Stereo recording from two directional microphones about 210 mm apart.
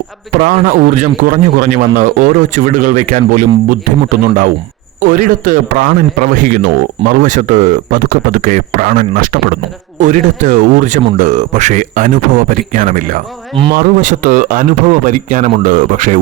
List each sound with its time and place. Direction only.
0.4 s a man's voice: 40° right (ahead or behind)
4.9 s a man's voice: 40° right (ahead or behind)